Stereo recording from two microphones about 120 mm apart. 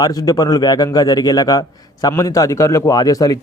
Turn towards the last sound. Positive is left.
turn(degrees=30)  # may be behind; listen again after turning